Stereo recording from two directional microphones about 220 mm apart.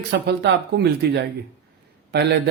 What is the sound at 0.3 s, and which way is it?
Speech, 50° right (ahead or behind).